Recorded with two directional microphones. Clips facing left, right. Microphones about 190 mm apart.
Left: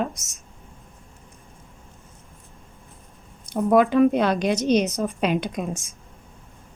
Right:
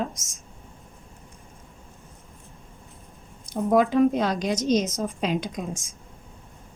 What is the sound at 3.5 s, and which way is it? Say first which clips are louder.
A woman's voice: left 3 dB; 65° left (ahead or behind).